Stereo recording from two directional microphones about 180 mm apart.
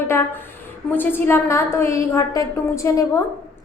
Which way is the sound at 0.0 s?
15° left (ahead or behind).